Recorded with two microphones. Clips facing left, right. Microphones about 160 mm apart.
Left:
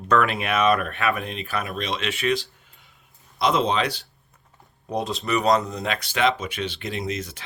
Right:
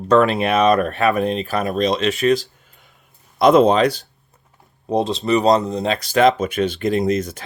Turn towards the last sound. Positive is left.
turn(degrees=-45)  # may be behind; listen again after turning